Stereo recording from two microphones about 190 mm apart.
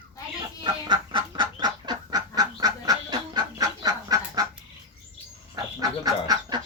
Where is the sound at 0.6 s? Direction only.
25° right (ahead or behind).